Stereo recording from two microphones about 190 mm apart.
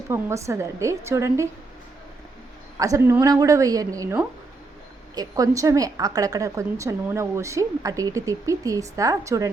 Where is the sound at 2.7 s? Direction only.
15° right (ahead or behind).